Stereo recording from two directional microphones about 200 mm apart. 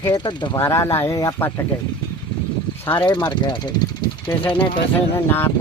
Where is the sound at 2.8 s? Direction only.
20° left (ahead or behind).